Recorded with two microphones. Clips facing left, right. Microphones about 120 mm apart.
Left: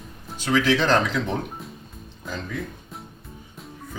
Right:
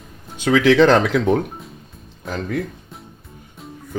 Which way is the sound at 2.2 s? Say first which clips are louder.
Right 7 dB; 70° right (ahead or behind).